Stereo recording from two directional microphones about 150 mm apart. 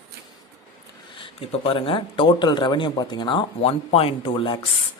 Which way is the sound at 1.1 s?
35° left (ahead or behind).